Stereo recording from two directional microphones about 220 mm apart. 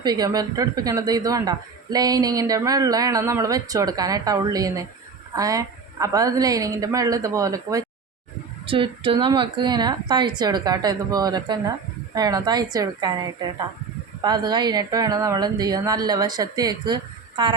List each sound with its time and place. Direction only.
0.0 s a woman's voice: 20° right (ahead or behind)